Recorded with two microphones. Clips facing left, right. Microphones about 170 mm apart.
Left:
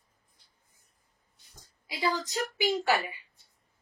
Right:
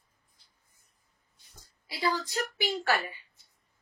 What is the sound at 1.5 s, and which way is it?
A woman's voice, 15° left (ahead or behind).